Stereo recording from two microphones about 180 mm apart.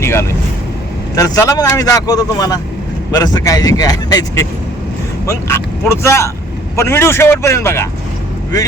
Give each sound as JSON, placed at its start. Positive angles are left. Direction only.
{"t": 0.0, "sound": "vehicle", "side_deg": 15}
{"t": 1.1, "sound": "speech", "side_deg": 20}